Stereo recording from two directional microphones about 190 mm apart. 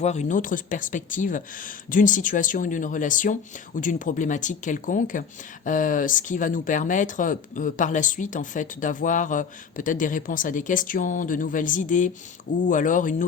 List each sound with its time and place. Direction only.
0.0 s speech: 35° left (ahead or behind)